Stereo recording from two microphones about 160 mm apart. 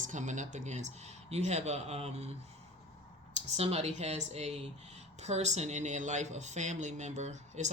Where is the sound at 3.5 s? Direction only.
40° right (ahead or behind).